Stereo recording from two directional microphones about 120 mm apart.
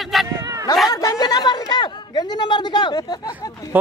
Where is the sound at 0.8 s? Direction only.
30° left (ahead or behind).